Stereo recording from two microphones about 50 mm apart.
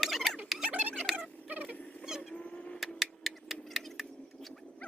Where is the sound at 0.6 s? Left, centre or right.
Right.